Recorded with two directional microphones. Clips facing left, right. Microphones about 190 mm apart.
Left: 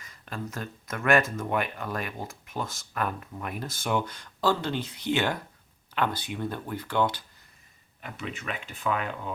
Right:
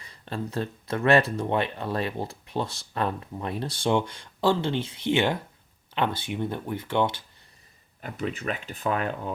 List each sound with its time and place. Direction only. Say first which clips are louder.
0.0 s speech: right 4 dB; 30° right (ahead or behind)
8.0 s speech: right 6 dB; 35° right (ahead or behind)